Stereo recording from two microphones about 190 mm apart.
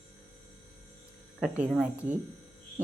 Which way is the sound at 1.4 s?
5° right (ahead or behind).